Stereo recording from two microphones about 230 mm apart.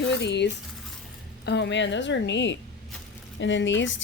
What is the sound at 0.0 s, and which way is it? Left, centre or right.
Speech, left.